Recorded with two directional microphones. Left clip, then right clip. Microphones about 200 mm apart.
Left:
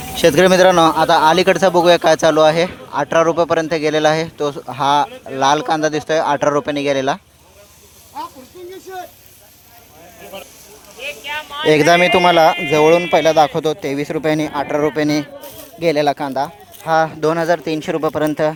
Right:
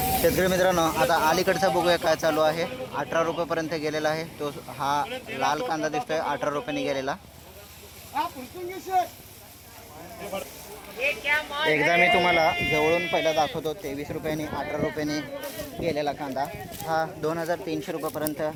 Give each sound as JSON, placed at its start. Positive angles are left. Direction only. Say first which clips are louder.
{"t": 0.2, "sound": "speech", "louder": "left 14 dB", "side_deg": 30}
{"t": 11.0, "sound": "speech", "louder": "even", "side_deg": -45}
{"t": 11.9, "sound": "speech", "louder": "left 8 dB", "side_deg": 50}
{"t": 12.4, "sound": "speech", "louder": "left 11 dB", "side_deg": 35}